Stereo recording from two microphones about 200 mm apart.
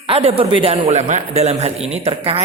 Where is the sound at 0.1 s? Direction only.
30° right (ahead or behind).